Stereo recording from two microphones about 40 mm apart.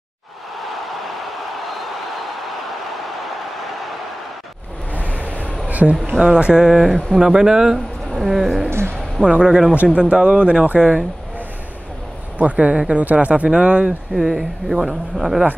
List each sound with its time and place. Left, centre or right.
0.6 s a sound: centre
4.9 s vehicle: left
5.7 s a sound: right
6.2 s speech: right
6.6 s speech: centre
7.2 s speech: centre
8.6 s speech: right
9.2 s speech: left
9.9 s speech: right
10.8 s speech: right
12.4 s speech: right
14.1 s speech: centre